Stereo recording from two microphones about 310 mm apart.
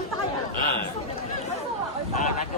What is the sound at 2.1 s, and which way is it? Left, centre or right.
Speech, left.